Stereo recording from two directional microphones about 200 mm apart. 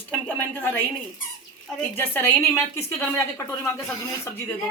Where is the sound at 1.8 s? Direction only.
10° left (ahead or behind).